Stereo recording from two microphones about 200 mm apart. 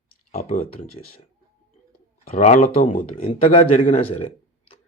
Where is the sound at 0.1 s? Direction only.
45° left (ahead or behind).